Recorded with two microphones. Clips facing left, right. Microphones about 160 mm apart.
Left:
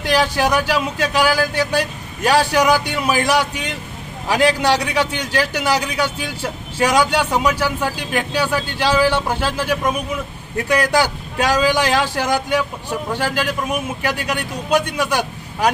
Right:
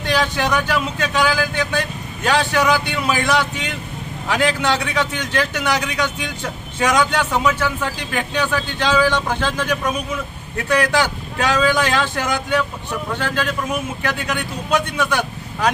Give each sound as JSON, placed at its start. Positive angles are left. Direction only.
{"t": 0.0, "sound": "speech", "side_deg": 10}
{"t": 4.3, "sound": "a man's voice", "side_deg": 35}
{"t": 4.6, "sound": "speech", "side_deg": 10}
{"t": 13.4, "sound": "speech", "side_deg": 10}